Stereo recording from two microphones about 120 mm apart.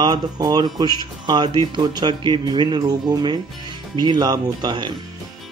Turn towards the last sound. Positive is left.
turn(degrees=-35)  # may be behind; listen again after turning